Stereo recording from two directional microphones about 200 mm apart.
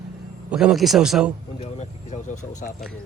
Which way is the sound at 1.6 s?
35° left (ahead or behind).